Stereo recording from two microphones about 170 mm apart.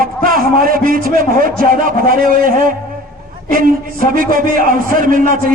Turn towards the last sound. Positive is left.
turn(degrees=-55)  # may be behind; listen again after turning